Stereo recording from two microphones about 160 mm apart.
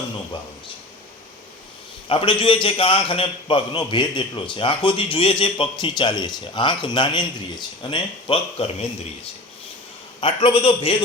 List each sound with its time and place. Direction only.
2.0 s a man's voice: 30° left (ahead or behind)
10.2 s a man's voice: 35° left (ahead or behind)